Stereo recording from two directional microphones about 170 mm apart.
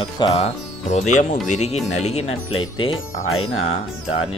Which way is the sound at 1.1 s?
45° left (ahead or behind).